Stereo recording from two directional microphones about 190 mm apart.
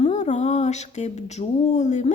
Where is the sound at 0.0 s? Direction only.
35° left (ahead or behind).